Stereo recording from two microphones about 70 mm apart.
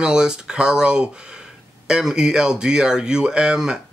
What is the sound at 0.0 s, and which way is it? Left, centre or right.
Speech, centre.